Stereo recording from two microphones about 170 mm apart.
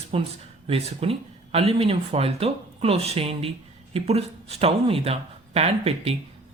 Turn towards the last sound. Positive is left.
turn(degrees=-35)  # may be behind; listen again after turning